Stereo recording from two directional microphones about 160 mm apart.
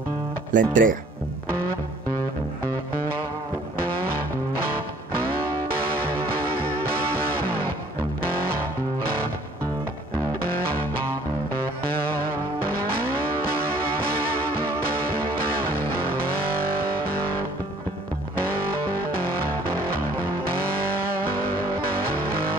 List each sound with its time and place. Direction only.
0.5 s speech: 55° right (ahead or behind)